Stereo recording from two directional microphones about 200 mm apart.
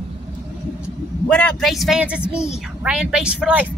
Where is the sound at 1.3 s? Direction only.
5° left (ahead or behind).